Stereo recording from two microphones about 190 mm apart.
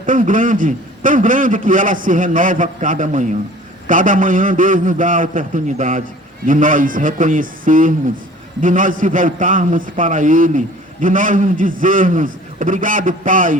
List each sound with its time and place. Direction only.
0.0 s a man's voice: 45° right (ahead or behind)